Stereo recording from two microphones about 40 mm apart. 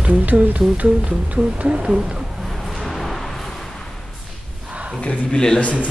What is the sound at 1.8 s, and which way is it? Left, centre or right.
Speech, centre.